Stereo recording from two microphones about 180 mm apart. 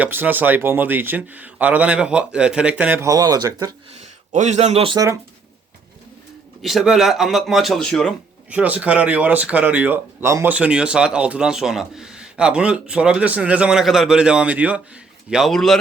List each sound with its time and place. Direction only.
0.0 s speech: 10° right (ahead or behind)
4.3 s a man's voice: 40° right (ahead or behind)
6.6 s speech: centre (ahead or behind)
8.4 s speech: 10° right (ahead or behind)